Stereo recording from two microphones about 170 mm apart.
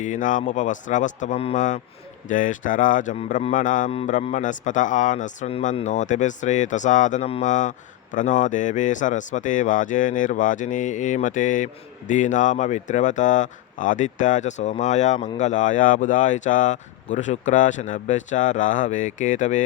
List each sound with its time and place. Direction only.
0.0 s speech: 50° left (ahead or behind)